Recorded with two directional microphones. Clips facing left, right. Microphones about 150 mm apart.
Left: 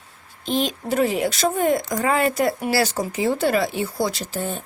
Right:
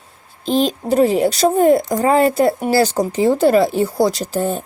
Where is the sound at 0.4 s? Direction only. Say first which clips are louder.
Right 6 dB; 35° right (ahead or behind).